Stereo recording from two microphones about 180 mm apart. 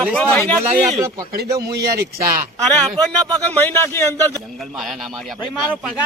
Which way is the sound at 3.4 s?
10° left (ahead or behind).